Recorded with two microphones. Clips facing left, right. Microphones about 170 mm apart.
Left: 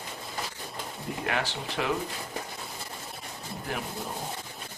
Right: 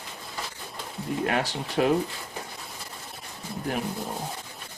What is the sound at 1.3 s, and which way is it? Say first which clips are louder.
Speech: right 3 dB; 35° right (ahead or behind).